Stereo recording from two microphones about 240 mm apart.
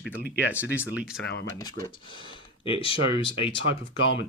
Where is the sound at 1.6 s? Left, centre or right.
Centre.